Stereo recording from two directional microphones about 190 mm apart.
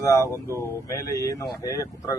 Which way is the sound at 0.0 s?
15° left (ahead or behind).